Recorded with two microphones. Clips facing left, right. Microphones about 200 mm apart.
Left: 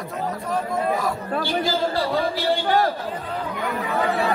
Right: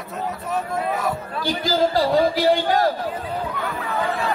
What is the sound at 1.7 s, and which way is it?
Speech, 90° right.